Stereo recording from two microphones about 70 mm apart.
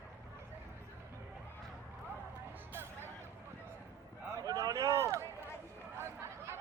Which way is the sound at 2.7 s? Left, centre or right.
Right.